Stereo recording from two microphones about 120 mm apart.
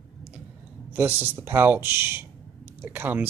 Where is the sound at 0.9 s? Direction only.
15° right (ahead or behind).